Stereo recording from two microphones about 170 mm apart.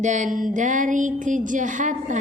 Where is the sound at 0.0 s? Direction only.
45° right (ahead or behind).